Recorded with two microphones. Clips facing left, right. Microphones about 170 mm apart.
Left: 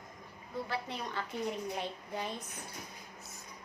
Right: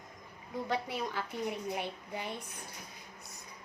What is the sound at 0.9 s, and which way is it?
A child's voice, 10° right (ahead or behind).